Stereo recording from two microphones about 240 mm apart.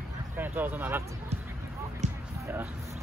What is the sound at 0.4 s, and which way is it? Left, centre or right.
Speech, centre.